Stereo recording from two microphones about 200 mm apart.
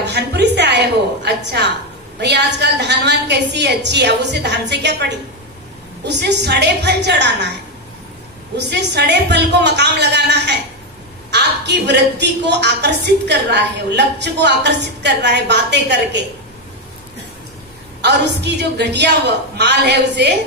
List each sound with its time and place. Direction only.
0.0 s a sound: 55° right (ahead or behind)
2.1 s a woman's voice: 60° right (ahead or behind)
8.5 s a woman's voice: 60° right (ahead or behind)
18.0 s a woman's voice: 55° right (ahead or behind)